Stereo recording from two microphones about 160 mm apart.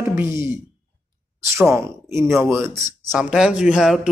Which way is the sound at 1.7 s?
15° right (ahead or behind).